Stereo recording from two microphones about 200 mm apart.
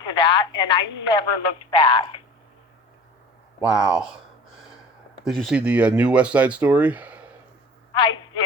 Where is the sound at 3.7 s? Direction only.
5° right (ahead or behind).